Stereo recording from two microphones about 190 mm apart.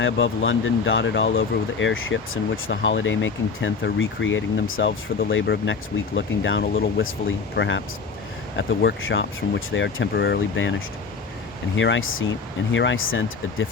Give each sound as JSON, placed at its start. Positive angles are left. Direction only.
{"t": 0.0, "sound": "speech", "side_deg": 85}
{"t": 12.7, "sound": "speech", "side_deg": 80}